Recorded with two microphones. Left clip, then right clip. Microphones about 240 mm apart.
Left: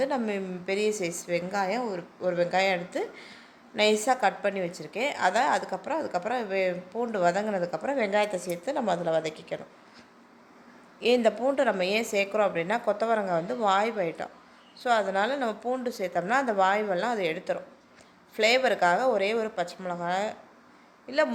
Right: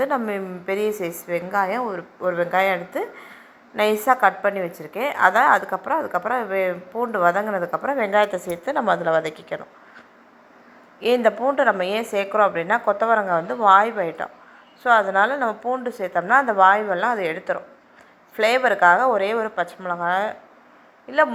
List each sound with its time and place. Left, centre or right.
0.0 s a woman's voice: centre
11.0 s a woman's voice: centre